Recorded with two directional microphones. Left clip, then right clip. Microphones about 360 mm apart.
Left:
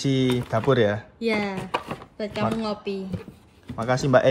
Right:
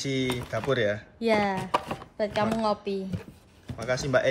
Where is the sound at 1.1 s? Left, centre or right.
Right.